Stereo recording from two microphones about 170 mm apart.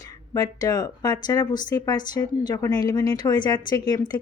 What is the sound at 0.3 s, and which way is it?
Speech, 25° left (ahead or behind).